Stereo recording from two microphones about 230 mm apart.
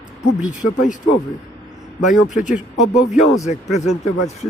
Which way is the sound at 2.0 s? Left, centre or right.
Left.